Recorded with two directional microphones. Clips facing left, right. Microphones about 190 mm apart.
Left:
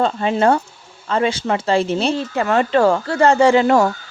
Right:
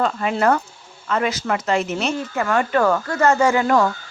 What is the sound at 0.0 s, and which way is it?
Speech, 30° left (ahead or behind).